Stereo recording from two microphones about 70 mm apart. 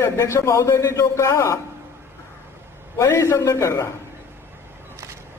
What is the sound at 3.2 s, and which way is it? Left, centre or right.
Speech, left.